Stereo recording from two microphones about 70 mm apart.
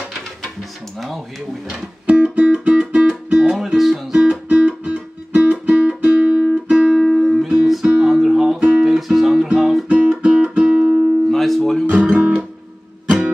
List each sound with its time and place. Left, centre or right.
0.9 s speech: centre
1.7 s music: centre
4.1 s music: centre
7.1 s music: centre
9.8 s guitar: centre
11.2 s music: centre
11.8 s music: right
12.1 s guitar: centre